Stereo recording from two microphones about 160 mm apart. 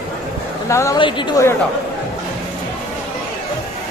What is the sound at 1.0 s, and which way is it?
Speech, 30° left (ahead or behind).